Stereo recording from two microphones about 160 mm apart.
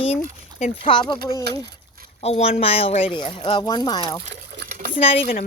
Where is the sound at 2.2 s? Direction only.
40° left (ahead or behind).